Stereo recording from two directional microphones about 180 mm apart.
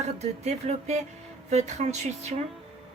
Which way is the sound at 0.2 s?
40° right (ahead or behind).